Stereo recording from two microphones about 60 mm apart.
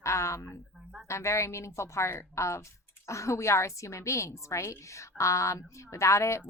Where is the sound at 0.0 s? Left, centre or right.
Left.